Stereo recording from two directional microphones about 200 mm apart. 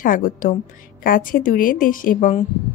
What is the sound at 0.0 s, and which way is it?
A woman's voice, 45° left (ahead or behind).